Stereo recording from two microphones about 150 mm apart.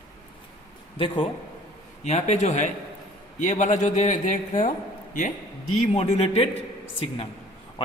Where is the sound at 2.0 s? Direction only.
50° left (ahead or behind).